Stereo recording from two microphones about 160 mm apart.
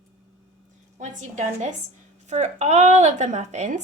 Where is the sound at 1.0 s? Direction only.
50° right (ahead or behind).